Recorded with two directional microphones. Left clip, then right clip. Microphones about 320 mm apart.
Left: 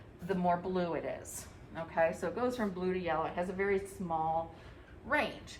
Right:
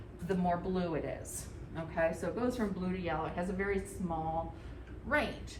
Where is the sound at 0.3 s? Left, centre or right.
Left.